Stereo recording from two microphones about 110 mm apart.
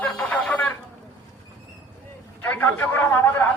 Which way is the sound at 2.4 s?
15° left (ahead or behind).